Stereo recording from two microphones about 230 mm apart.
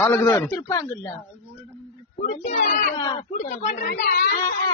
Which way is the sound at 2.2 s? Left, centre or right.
Left.